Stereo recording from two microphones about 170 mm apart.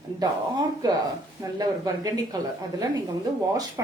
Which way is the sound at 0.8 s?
25° right (ahead or behind).